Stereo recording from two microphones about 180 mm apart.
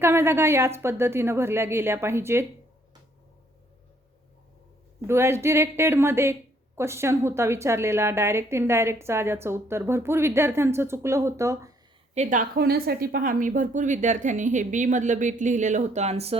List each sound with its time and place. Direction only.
0.0 s a woman's voice: 15° right (ahead or behind)
5.0 s a woman's voice: 15° right (ahead or behind)
12.1 s a woman's voice: 40° right (ahead or behind)